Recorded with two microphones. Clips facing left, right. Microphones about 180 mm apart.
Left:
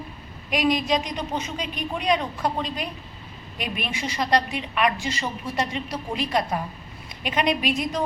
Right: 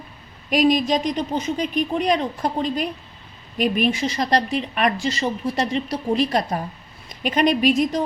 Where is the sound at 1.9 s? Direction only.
45° right (ahead or behind).